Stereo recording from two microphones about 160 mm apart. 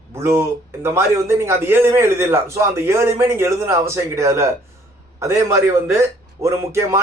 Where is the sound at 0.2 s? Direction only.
15° right (ahead or behind).